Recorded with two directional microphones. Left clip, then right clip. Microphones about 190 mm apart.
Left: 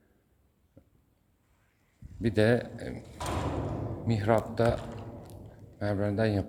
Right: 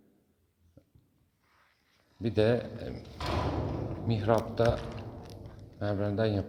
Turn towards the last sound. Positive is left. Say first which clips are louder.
# left 1 dB
turn(degrees=30)  # may be behind; listen again after turning